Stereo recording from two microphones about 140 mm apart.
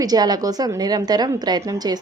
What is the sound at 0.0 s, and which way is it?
A woman's voice, 30° right (ahead or behind).